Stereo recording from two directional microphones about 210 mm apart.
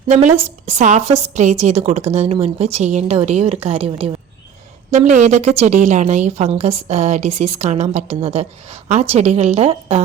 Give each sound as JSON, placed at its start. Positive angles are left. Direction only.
{"t": 0.1, "sound": "a woman's voice", "side_deg": -35}